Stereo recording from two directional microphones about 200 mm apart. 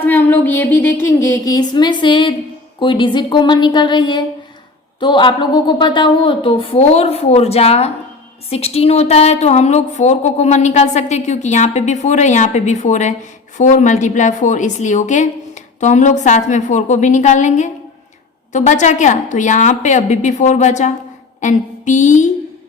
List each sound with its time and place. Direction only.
0.0 s a woman's voice: 10° left (ahead or behind); by 20.9 s 35° left (ahead or behind)
21.4 s music: 35° left (ahead or behind)